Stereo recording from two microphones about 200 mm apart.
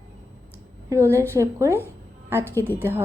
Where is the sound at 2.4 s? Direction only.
10° left (ahead or behind).